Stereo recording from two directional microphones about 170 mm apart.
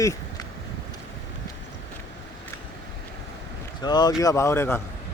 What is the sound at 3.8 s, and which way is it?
Speech, 25° left (ahead or behind).